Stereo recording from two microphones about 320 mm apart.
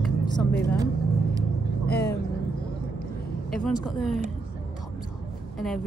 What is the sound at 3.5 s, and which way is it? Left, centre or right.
Speech, centre.